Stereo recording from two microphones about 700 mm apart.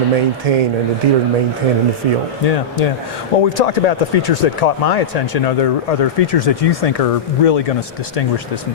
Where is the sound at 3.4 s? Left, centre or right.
Left.